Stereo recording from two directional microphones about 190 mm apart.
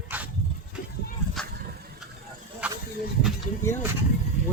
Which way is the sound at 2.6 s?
5° right (ahead or behind).